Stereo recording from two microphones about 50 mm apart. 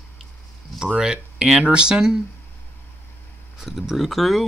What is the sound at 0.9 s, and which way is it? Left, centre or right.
Speech, centre.